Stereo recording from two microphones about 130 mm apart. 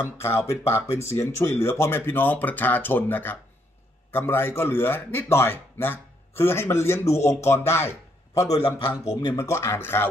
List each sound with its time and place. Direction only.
0.2 s a man's voice: 20° left (ahead or behind)
8.5 s a man's voice: 45° left (ahead or behind)
9.0 s speech: 25° left (ahead or behind)